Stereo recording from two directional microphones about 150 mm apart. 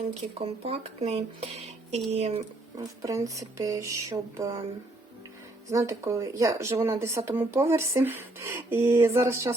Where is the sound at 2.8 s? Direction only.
20° right (ahead or behind).